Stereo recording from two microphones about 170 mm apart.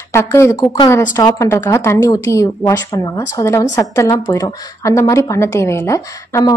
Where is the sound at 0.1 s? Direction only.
15° left (ahead or behind).